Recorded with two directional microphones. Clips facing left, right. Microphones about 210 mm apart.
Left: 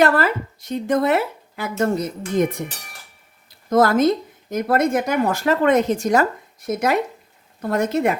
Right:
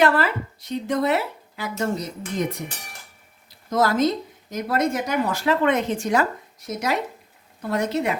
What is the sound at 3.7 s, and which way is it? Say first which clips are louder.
Speech: left 5 dB; 50° left (ahead or behind).